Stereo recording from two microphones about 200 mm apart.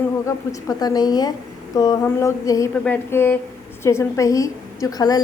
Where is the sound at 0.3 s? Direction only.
20° left (ahead or behind).